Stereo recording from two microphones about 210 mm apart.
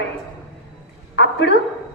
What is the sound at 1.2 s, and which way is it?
Speech, 55° left (ahead or behind).